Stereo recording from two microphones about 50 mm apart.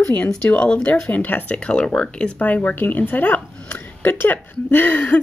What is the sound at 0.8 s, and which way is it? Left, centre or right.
Speech, left.